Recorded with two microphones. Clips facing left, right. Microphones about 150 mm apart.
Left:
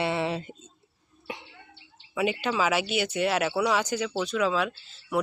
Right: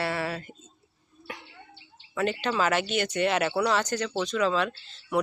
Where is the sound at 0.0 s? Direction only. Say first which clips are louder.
Left 3 dB; 20° left (ahead or behind).